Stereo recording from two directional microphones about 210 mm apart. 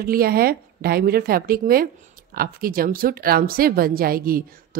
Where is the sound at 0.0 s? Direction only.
45° right (ahead or behind).